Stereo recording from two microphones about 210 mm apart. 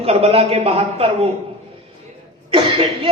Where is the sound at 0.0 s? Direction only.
30° right (ahead or behind).